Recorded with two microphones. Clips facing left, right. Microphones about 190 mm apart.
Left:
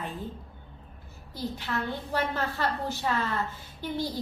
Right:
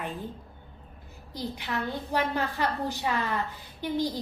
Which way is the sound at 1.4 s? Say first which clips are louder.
Even; 15° right (ahead or behind).